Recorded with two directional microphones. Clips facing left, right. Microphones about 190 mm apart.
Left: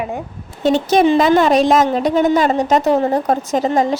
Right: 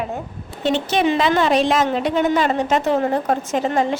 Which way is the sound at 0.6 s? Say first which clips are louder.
Left 5 dB; 40° left (ahead or behind).